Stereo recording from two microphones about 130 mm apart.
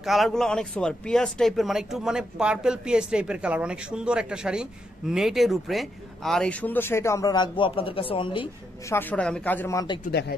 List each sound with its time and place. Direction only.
0.0 s speech: centre (ahead or behind); by 8.5 s 40° left (ahead or behind)
8.8 s a woman's voice: 15° left (ahead or behind)